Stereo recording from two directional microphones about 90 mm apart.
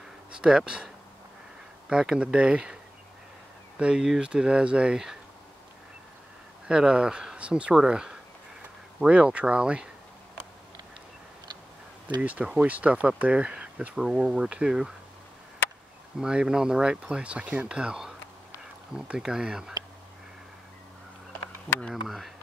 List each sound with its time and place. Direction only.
0.4 s speech: 10° right (ahead or behind)
1.9 s speech: 10° right (ahead or behind)
6.7 s speech: 10° right (ahead or behind)
12.2 s speech: 15° right (ahead or behind)
16.2 s speech: 10° right (ahead or behind)
21.7 s speech: 20° left (ahead or behind)
22.0 s speech: centre (ahead or behind)